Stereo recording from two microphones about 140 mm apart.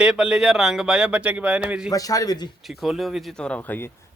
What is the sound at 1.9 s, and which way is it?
Speech, 25° left (ahead or behind).